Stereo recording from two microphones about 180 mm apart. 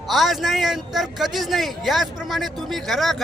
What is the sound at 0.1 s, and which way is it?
A man's voice, centre (ahead or behind).